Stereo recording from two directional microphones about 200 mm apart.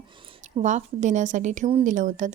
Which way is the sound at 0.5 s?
40° right (ahead or behind).